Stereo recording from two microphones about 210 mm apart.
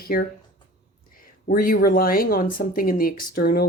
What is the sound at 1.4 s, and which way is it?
Speech, 40° left (ahead or behind).